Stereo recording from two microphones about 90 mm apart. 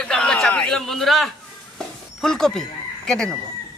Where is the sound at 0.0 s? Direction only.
10° left (ahead or behind).